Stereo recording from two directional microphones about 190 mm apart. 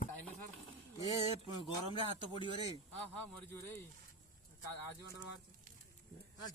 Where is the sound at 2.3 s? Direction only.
25° left (ahead or behind).